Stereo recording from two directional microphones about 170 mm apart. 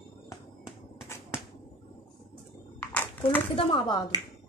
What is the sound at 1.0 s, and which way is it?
Finger snapping, 15° left (ahead or behind).